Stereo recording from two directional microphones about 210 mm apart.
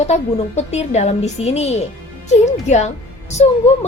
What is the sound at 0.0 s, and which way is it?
Speech, 30° left (ahead or behind).